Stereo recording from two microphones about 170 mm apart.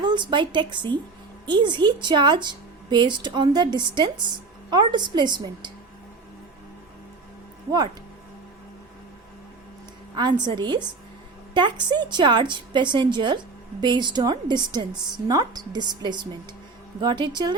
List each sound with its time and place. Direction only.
0.0 s a woman's voice: 25° right (ahead or behind)
10.2 s a woman's voice: 25° right (ahead or behind)